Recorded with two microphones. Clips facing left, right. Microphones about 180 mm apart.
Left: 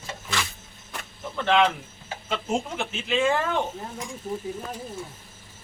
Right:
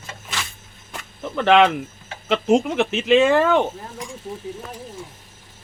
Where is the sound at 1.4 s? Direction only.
85° right.